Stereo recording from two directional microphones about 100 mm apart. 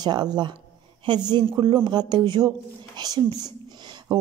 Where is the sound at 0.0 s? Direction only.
45° right (ahead or behind).